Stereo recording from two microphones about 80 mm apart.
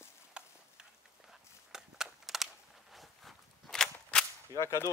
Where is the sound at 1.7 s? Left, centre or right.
Centre.